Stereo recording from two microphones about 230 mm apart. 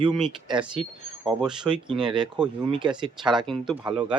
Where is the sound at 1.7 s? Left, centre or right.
Right.